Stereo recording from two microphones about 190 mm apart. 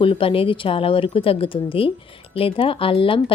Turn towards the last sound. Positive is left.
turn(degrees=30)  # may be behind; listen again after turning